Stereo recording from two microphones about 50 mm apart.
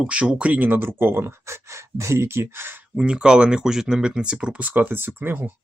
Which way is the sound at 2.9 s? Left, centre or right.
Centre.